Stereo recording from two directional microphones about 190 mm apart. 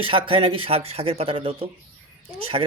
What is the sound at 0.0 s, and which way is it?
A man's voice, 30° right (ahead or behind).